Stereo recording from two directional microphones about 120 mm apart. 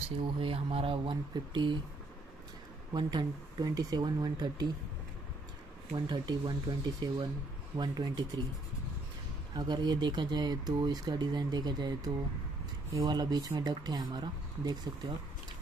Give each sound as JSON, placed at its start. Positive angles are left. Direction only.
{"t": 0.4, "sound": "speech", "side_deg": -50}
{"t": 2.9, "sound": "speech", "side_deg": -40}
{"t": 6.0, "sound": "speech", "side_deg": -40}
{"t": 9.6, "sound": "speech", "side_deg": -35}